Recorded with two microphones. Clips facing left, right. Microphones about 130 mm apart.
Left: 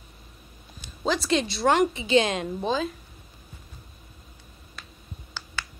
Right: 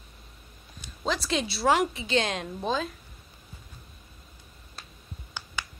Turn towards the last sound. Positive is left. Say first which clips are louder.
# left 1 dB
turn(degrees=-15)  # may be behind; listen again after turning